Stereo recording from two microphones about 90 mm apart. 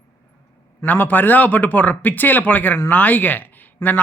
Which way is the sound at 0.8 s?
20° left (ahead or behind).